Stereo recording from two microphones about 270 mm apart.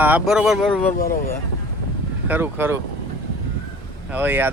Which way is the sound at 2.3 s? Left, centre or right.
Centre.